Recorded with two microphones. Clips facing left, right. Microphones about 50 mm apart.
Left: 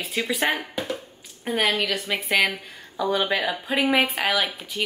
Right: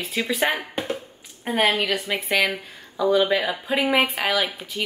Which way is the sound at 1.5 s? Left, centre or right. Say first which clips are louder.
Right 2 dB; right.